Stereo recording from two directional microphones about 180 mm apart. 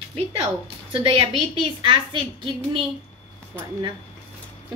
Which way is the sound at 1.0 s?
30° right (ahead or behind).